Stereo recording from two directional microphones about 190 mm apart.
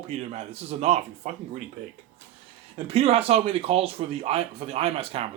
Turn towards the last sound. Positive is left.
turn(degrees=-30)  # may be behind; listen again after turning